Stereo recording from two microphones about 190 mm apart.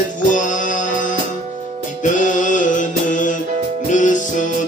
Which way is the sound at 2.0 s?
40° left (ahead or behind).